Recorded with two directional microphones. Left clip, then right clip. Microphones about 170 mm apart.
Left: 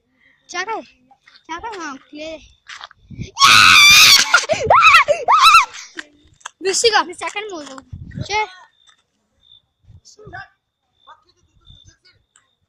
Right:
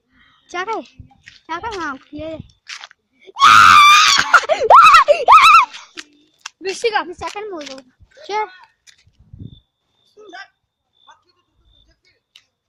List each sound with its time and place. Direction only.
0.1 s a sound: 35° right (ahead or behind)
1.5 s a child's voice: 40° right (ahead or behind)
3.3 s screaming: 25° right (ahead or behind); by 5.5 s 45° right (ahead or behind)
5.5 s a sound: 30° right (ahead or behind)
6.6 s speech: 45° left (ahead or behind)
7.1 s speech: 15° right (ahead or behind)
8.3 s a child's voice: 30° right (ahead or behind)